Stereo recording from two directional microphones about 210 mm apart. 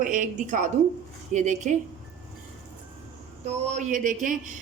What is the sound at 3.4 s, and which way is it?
A woman's voice, 35° right (ahead or behind).